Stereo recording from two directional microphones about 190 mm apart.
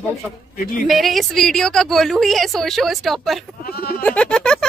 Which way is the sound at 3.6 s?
55° left (ahead or behind).